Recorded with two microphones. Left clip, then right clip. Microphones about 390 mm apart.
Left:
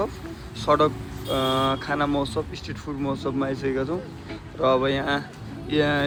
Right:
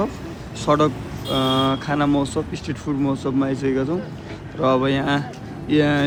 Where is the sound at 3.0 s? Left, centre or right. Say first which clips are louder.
Right 4 dB; right.